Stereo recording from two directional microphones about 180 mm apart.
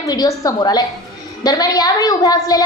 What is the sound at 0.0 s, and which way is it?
A woman's voice, 20° left (ahead or behind).